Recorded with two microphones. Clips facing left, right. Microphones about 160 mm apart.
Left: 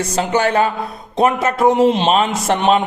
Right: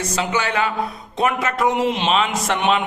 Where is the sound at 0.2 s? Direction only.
45° left (ahead or behind).